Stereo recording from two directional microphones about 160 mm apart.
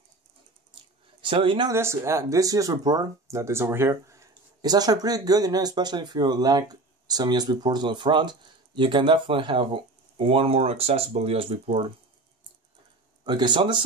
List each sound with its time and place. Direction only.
1.2 s speech: 30° right (ahead or behind)
1.7 s speech: 15° right (ahead or behind); by 11.8 s 35° right (ahead or behind)
13.2 s speech: 30° right (ahead or behind)